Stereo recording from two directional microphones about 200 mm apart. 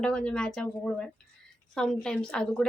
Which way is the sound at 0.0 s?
5° left (ahead or behind).